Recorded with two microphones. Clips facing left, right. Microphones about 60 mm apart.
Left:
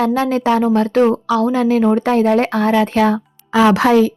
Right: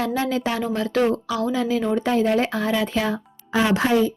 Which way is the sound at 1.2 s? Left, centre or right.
Left.